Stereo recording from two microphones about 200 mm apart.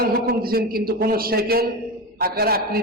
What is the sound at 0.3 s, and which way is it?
A man's voice, 50° right (ahead or behind).